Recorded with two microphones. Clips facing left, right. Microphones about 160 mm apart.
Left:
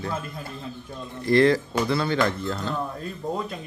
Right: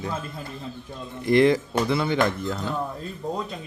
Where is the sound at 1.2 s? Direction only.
20° right (ahead or behind).